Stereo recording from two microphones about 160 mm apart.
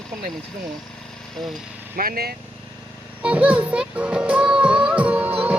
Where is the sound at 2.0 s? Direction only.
70° right (ahead or behind).